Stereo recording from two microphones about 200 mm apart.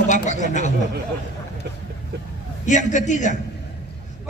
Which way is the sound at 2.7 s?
35° left (ahead or behind).